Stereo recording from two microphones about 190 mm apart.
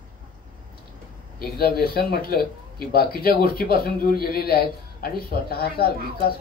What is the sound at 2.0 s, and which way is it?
A man's voice, 55° left (ahead or behind).